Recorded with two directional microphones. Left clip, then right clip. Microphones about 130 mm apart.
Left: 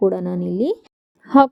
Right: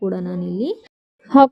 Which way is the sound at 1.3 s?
Centre (ahead or behind).